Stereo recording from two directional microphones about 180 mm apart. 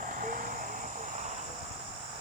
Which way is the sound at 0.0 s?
45° right (ahead or behind).